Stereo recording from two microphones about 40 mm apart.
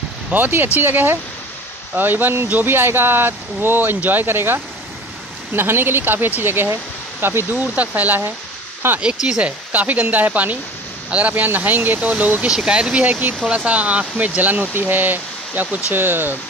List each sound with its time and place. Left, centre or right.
0.3 s speech: right
2.6 s speech: right
7.7 s speech: right
8.8 s speech: right
9.4 s speech: right
11.4 s speech: right
12.4 s speech: right
13.0 s speech: right
14.7 s speech: right